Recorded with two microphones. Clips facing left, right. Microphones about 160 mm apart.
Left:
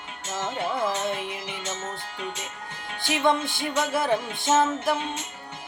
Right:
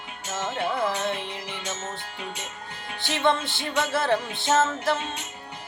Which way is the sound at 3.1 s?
15° left (ahead or behind).